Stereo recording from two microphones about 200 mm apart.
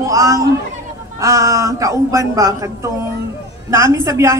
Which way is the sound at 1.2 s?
15° right (ahead or behind).